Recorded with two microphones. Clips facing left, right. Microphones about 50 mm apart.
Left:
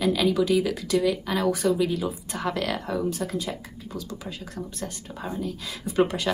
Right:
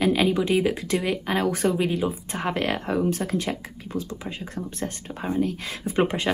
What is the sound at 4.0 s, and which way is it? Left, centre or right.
A woman's voice, right.